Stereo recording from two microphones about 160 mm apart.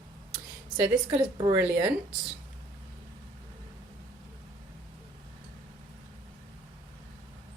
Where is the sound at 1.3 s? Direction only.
25° right (ahead or behind).